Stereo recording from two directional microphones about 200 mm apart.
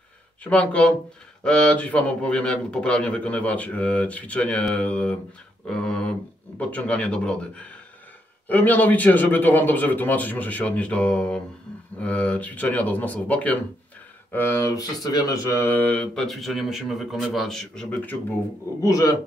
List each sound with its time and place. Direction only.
0.4 s speech: 5° left (ahead or behind)
18.8 s speech: 15° left (ahead or behind)